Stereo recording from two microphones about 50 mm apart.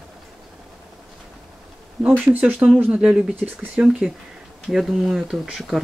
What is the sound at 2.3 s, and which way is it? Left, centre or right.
Speech, right.